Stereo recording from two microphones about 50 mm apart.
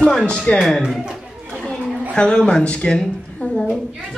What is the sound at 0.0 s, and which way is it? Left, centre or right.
Speech, centre.